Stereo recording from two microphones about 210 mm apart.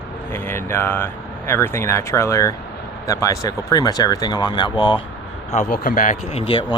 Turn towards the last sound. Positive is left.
turn(degrees=25)  # may be behind; listen again after turning